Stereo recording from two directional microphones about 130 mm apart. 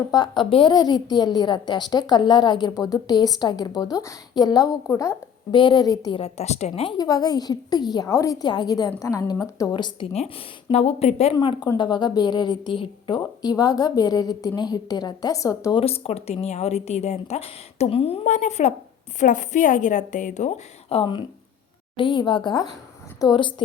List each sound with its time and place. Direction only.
0.1 s a woman's voice: 35° left (ahead or behind)
5.5 s a woman's voice: 35° left (ahead or behind)
6.1 s speech: 50° left (ahead or behind)
6.9 s a woman's voice: 30° left (ahead or behind)
9.7 s a woman's voice: 40° left (ahead or behind)
10.1 s speech: 50° left (ahead or behind)
11.3 s a woman's voice: 35° left (ahead or behind)
15.7 s speech: 50° left (ahead or behind)
18.3 s speech: 65° left (ahead or behind)
19.2 s a woman's voice: 75° left (ahead or behind)
20.9 s a woman's voice: 40° left (ahead or behind)